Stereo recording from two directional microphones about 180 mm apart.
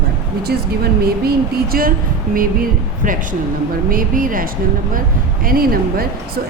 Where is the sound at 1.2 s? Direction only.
55° right (ahead or behind).